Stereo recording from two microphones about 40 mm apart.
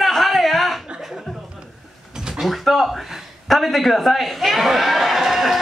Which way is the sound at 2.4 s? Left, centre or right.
Centre.